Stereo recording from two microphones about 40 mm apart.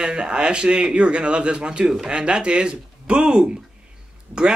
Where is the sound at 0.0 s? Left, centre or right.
Right.